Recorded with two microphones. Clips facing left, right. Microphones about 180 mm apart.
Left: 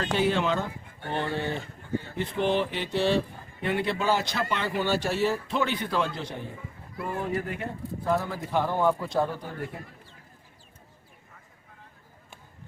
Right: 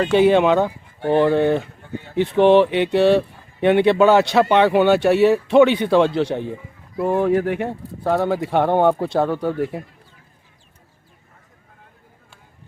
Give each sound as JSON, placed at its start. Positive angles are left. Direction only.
{"t": 0.0, "sound": "speech", "side_deg": -65}
{"t": 2.1, "sound": "a man's voice", "side_deg": -70}